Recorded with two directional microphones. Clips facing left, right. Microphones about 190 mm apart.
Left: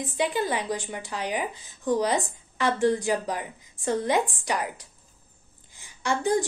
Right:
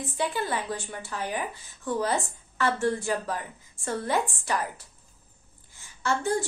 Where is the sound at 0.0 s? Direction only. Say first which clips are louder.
Left 3 dB; 15° left (ahead or behind).